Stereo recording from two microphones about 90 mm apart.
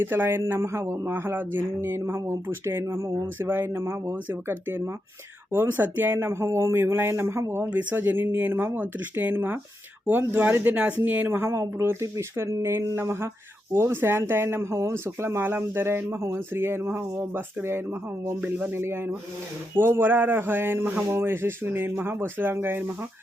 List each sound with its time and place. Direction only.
0.0 s speech: 25° right (ahead or behind)
7.6 s speech: 15° right (ahead or behind)